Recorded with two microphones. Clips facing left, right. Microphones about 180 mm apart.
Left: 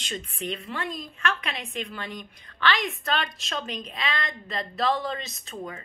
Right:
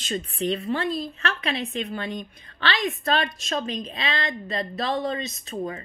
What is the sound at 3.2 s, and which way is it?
Speech, 20° right (ahead or behind).